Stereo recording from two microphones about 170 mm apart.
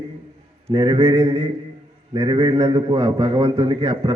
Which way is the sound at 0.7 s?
25° right (ahead or behind).